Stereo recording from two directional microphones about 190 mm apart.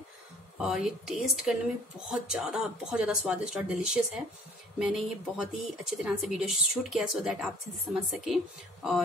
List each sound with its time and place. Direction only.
0.6 s speech: 5° right (ahead or behind)